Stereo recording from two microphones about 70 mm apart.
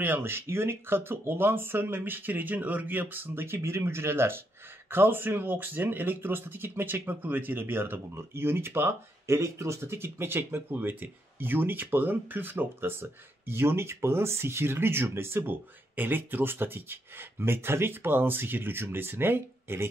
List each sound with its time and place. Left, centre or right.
0.0 s speech: right